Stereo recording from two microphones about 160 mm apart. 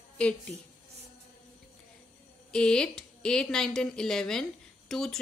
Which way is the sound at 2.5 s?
5° left (ahead or behind).